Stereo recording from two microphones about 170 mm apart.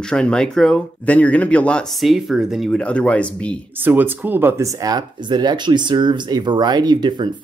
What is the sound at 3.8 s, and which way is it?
Speech, 10° right (ahead or behind).